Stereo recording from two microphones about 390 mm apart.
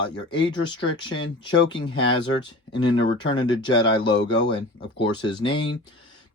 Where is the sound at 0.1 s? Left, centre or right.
Centre.